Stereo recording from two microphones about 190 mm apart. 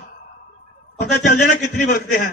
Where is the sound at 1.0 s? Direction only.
45° left (ahead or behind).